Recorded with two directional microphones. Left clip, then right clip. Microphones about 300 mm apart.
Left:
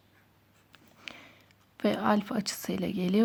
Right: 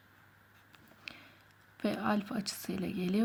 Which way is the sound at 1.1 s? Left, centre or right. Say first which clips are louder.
Left 3 dB; centre.